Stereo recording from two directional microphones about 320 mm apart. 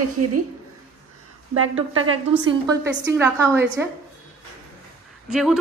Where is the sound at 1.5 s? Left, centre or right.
Right.